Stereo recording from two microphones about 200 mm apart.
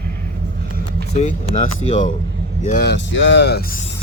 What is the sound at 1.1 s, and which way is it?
Speech, 35° left (ahead or behind).